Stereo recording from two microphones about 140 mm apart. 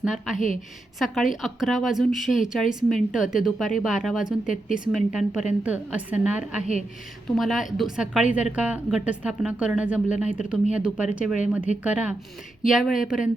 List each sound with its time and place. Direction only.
0.0 s speech: 5° right (ahead or behind)
0.3 s a woman's voice: 65° left (ahead or behind)
0.9 s speech: centre (ahead or behind)